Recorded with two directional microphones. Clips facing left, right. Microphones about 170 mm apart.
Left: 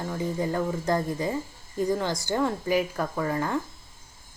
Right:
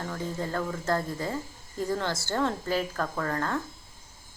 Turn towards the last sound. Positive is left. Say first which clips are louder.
# left 3 dB
turn(degrees=10)  # may be behind; listen again after turning